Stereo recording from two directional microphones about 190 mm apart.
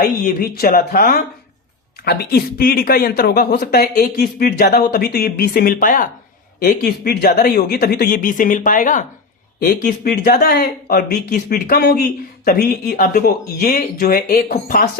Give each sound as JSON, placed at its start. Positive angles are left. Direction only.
{"t": 0.0, "sound": "speech", "side_deg": 50}